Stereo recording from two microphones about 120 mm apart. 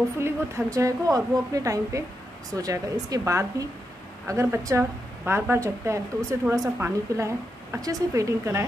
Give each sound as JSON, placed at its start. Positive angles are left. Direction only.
{"t": 0.2, "sound": "a woman's voice", "side_deg": -25}